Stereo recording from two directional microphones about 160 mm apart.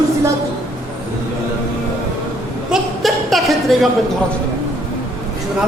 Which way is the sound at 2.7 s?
Centre (ahead or behind).